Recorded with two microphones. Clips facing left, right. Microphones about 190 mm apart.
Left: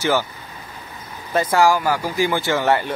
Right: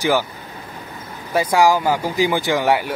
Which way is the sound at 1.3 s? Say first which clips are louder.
Right 1 dB; 15° right (ahead or behind).